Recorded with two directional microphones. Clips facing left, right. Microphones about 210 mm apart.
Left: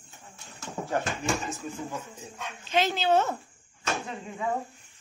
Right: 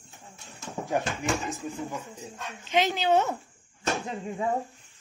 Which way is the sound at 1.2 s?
15° right (ahead or behind).